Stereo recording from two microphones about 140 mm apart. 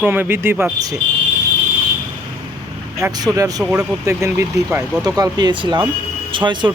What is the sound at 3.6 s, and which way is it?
Speech, 10° right (ahead or behind).